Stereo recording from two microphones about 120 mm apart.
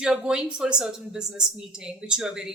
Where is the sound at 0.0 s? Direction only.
5° right (ahead or behind).